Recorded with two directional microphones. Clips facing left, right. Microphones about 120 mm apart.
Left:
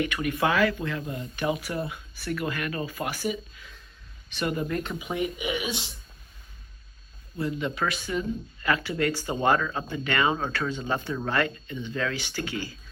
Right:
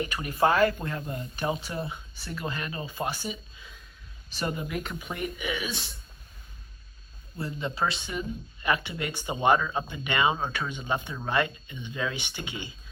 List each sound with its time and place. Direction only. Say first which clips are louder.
0.0 s speech: even; 35° right (ahead or behind)
4.7 s speech: left 4 dB; centre (ahead or behind)
4.9 s speech: left 4 dB; 15° left (ahead or behind)
7.3 s speech: left 3 dB; 30° right (ahead or behind)